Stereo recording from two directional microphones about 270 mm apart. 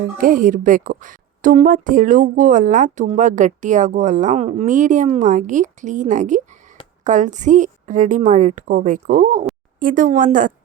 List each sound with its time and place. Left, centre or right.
0.2 s a woman's voice: right